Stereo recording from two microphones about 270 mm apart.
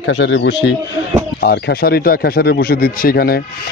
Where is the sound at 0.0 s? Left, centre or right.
Left.